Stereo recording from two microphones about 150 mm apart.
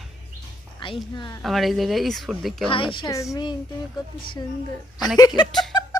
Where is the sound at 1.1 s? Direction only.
30° left (ahead or behind).